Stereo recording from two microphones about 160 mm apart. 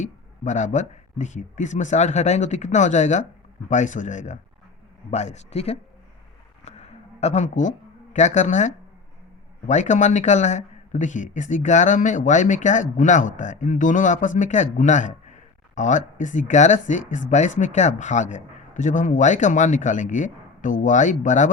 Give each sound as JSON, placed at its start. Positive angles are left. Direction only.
{"t": 0.0, "sound": "speech", "side_deg": 50}
{"t": 6.7, "sound": "a sound", "side_deg": 45}
{"t": 8.1, "sound": "speech", "side_deg": 50}